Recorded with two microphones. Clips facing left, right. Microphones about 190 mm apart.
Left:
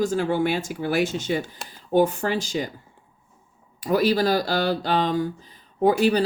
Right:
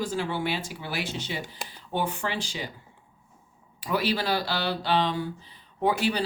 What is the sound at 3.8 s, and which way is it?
Speech, 45° left (ahead or behind).